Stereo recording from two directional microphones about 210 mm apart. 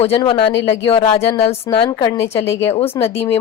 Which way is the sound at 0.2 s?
25° left (ahead or behind).